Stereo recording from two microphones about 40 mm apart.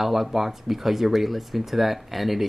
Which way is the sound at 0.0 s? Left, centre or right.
Centre.